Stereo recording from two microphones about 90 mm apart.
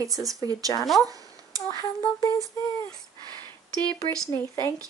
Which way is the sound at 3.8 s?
50° right (ahead or behind).